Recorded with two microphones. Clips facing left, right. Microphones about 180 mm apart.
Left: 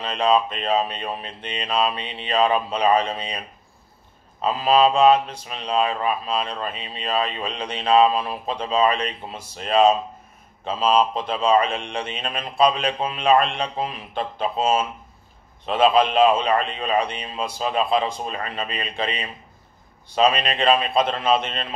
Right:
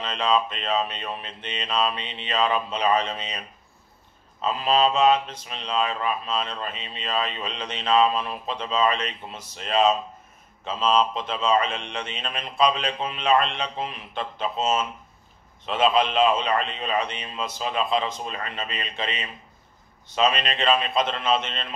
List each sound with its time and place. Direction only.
0.0 s speech: 40° left (ahead or behind)
4.5 s speech: 35° left (ahead or behind)
10.8 s speech: 10° left (ahead or behind)
11.1 s speech: 35° left (ahead or behind)